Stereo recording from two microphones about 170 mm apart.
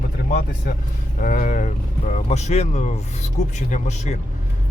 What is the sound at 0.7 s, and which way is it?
Speech, 65° left (ahead or behind).